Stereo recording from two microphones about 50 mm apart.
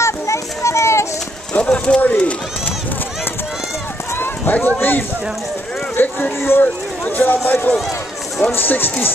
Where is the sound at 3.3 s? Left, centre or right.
Left.